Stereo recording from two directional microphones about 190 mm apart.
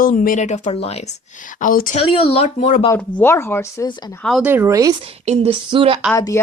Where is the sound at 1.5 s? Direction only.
45° left (ahead or behind).